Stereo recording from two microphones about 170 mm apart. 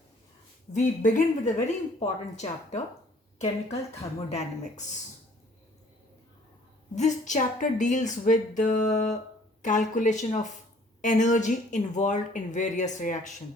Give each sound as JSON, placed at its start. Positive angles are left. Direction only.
{"t": 0.7, "sound": "a woman's voice", "side_deg": 50}
{"t": 6.9, "sound": "speech", "side_deg": 45}